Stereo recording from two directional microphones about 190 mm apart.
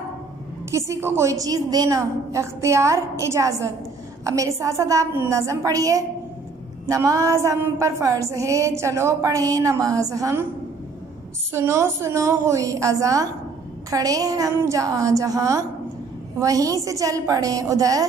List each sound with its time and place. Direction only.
0.7 s a woman's voice: 15° right (ahead or behind)
11.5 s a woman's voice: 15° right (ahead or behind)